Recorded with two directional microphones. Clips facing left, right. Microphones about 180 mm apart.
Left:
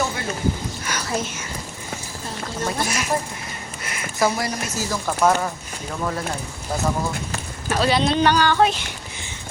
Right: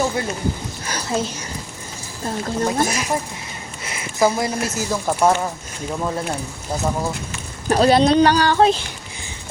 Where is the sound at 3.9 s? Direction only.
20° right (ahead or behind).